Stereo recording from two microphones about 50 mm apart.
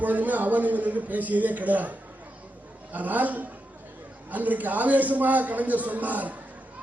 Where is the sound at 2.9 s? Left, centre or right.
Right.